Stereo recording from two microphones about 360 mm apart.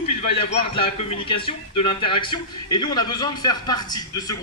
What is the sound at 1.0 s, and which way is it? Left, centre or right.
A man's voice, centre.